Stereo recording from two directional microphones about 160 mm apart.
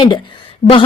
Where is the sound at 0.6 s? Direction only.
40° left (ahead or behind).